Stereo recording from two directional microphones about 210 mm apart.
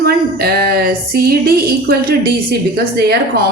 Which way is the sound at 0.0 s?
50° right (ahead or behind).